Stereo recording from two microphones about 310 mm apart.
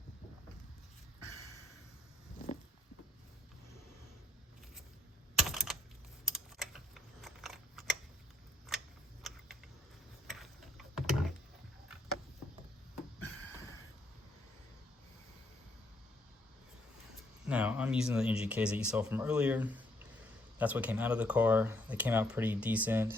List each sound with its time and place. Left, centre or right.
5.4 s computer keyboard: centre
6.2 s typing: centre
9.2 s a sound: centre
17.4 s speech: centre